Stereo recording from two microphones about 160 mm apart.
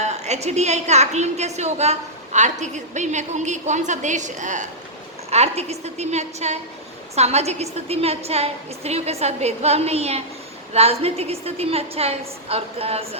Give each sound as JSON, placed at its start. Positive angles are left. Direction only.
{"t": 0.0, "sound": "a woman's voice", "side_deg": -45}